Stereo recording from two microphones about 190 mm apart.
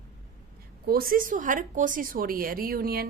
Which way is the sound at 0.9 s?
50° right (ahead or behind).